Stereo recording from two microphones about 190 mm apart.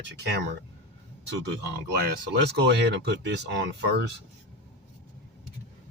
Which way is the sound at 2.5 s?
65° right (ahead or behind).